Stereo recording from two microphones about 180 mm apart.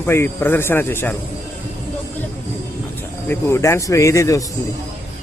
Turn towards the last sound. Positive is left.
turn(degrees=15)  # may be behind; listen again after turning